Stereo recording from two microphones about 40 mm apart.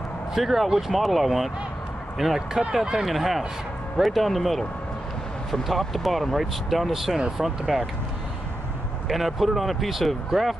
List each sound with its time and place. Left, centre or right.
0.3 s speech: centre
7.2 s speech: centre
7.4 s speech: centre
9.1 s speech: centre